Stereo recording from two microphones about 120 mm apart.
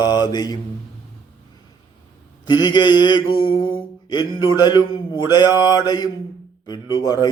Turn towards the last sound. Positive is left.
turn(degrees=35)  # may be behind; listen again after turning